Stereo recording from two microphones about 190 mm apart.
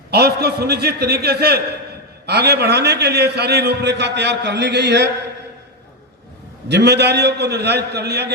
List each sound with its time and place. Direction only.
0.1 s a man's voice: 55° right (ahead or behind)
6.7 s a man's voice: 60° right (ahead or behind)